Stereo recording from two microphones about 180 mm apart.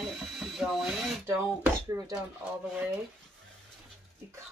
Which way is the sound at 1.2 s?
15° right (ahead or behind).